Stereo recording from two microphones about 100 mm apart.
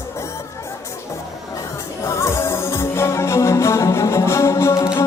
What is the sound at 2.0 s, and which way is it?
Music, 30° left (ahead or behind).